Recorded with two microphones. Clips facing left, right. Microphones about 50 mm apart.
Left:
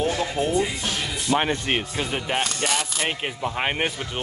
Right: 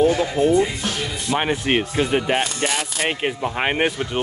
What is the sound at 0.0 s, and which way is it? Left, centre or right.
Speech, centre.